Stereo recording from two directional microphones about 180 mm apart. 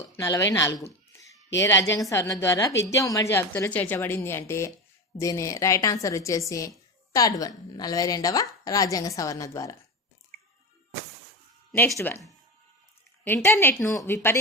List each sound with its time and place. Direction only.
0.2 s a woman's voice: 15° left (ahead or behind)
11.9 s speech: 15° left (ahead or behind)